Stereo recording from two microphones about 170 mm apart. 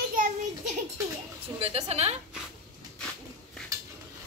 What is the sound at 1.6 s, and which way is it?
Speech, 35° right (ahead or behind).